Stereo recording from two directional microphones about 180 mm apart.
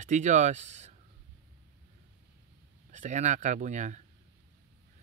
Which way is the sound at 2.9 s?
45° right (ahead or behind).